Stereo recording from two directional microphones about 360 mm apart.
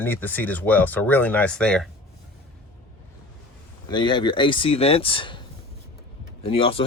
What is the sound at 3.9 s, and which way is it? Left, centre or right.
Speech, centre.